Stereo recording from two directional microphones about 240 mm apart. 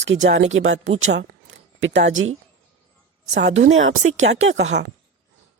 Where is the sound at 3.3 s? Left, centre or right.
Right.